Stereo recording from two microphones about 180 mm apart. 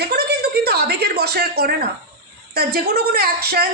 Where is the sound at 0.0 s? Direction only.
65° right (ahead or behind).